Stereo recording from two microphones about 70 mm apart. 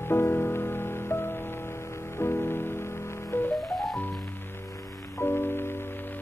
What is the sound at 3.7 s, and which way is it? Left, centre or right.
Music, centre.